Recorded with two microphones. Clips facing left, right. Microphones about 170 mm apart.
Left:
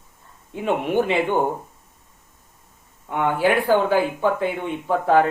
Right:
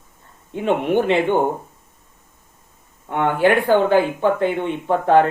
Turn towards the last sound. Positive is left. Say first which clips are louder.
# right 3 dB
turn(degrees=5)  # may be behind; listen again after turning